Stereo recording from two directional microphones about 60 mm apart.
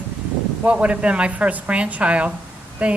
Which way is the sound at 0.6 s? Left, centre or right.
Right.